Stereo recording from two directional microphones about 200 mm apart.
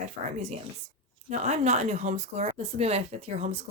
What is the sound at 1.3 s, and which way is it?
A woman's voice, 35° right (ahead or behind).